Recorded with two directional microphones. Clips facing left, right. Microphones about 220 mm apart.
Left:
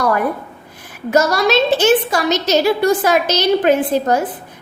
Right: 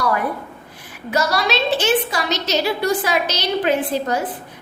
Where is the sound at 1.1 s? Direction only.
45° left (ahead or behind).